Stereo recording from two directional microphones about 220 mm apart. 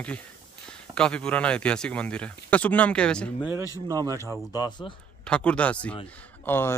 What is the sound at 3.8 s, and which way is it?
Speech, 15° right (ahead or behind).